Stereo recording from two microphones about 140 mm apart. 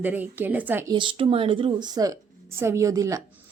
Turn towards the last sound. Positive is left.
turn(degrees=-25)  # may be behind; listen again after turning